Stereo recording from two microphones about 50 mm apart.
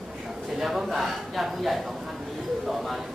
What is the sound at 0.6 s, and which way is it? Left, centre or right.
A man's voice, centre.